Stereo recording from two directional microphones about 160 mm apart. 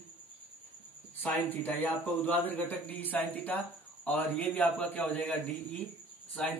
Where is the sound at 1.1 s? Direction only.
10° left (ahead or behind).